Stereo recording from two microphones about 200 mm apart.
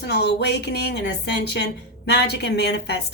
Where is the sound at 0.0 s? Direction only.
55° left (ahead or behind).